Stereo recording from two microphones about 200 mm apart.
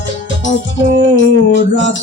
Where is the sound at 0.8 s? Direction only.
65° left (ahead or behind).